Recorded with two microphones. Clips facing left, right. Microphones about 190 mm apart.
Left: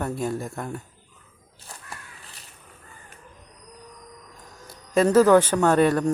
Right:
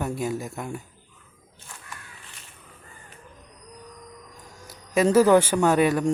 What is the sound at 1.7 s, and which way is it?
Crow, 40° left (ahead or behind).